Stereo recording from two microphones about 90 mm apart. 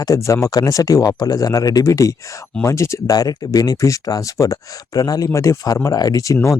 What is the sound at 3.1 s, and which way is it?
Speech, 45° left (ahead or behind).